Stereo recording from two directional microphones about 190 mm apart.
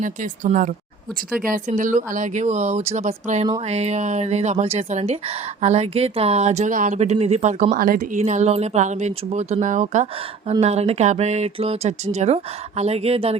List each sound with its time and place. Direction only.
0.0 s speech: 40° right (ahead or behind)